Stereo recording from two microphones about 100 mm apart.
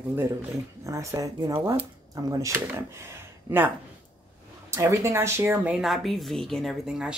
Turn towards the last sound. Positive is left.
turn(degrees=-5)  # may be behind; listen again after turning